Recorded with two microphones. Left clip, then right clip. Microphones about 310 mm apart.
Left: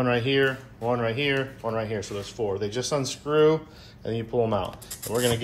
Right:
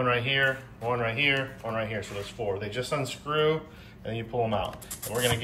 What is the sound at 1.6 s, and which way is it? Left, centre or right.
Speech, left.